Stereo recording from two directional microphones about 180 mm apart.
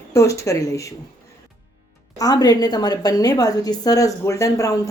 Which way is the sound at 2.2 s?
20° left (ahead or behind).